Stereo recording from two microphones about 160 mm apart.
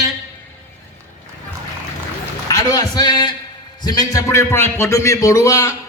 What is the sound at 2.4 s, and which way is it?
A man's voice, 20° left (ahead or behind).